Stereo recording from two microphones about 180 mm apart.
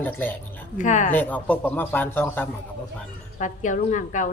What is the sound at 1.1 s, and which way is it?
Speech, 10° left (ahead or behind).